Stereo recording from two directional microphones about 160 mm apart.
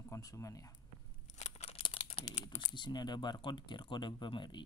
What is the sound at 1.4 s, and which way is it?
Computer keyboard, 40° left (ahead or behind).